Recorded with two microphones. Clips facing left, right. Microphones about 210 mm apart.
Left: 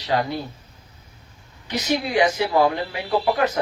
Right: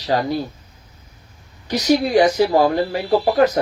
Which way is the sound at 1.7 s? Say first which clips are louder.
Right 7 dB; 40° right (ahead or behind).